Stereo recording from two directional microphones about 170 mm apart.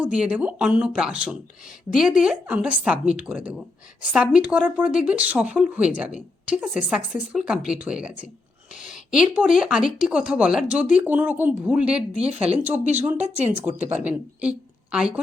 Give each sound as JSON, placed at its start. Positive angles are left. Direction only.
{"t": 0.0, "sound": "speech", "side_deg": -5}
{"t": 12.1, "sound": "speech", "side_deg": -35}
{"t": 12.5, "sound": "speech", "side_deg": -10}
{"t": 12.8, "sound": "speech", "side_deg": -40}
{"t": 13.8, "sound": "speech", "side_deg": -10}